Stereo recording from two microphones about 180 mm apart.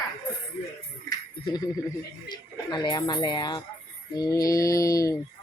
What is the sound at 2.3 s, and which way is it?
Speech, 25° left (ahead or behind).